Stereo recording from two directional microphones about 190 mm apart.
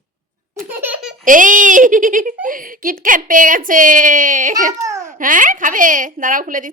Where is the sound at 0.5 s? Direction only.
10° right (ahead or behind).